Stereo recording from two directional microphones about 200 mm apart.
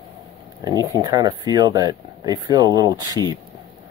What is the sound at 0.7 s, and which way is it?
Speech, 20° right (ahead or behind).